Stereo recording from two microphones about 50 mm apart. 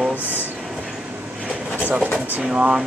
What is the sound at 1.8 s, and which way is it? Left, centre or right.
Pigeon, right.